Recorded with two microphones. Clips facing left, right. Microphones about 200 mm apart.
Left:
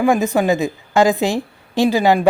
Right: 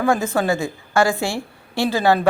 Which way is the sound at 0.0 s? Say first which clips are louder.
Left 4 dB; 15° left (ahead or behind).